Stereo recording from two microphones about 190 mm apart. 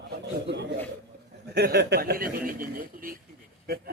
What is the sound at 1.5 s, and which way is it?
Speech, 60° right (ahead or behind).